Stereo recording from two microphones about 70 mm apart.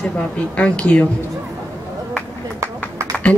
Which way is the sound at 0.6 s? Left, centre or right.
Centre.